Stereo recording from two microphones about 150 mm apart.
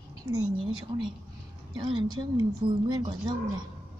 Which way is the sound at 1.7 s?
35° right (ahead or behind).